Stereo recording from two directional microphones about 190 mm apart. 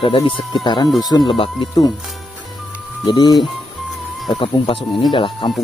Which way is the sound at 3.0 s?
20° left (ahead or behind).